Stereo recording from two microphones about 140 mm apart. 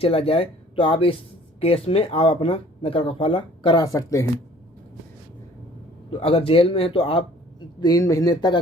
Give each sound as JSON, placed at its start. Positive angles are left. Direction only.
{"t": 0.0, "sound": "speech", "side_deg": 40}
{"t": 6.1, "sound": "speech", "side_deg": 40}
{"t": 7.8, "sound": "speech", "side_deg": 25}